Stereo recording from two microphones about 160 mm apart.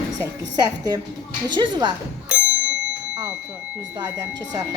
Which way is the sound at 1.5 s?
25° right (ahead or behind).